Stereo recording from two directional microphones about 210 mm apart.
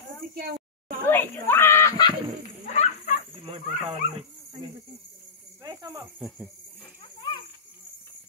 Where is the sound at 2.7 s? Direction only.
35° left (ahead or behind).